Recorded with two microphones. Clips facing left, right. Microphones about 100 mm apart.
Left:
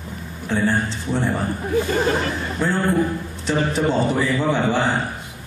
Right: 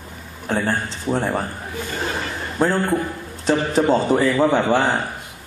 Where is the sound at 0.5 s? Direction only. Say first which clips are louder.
Left 1 dB; 45° right (ahead or behind).